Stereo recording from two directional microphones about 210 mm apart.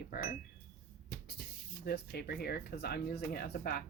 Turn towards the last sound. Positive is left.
turn(degrees=45)  # may be behind; listen again after turning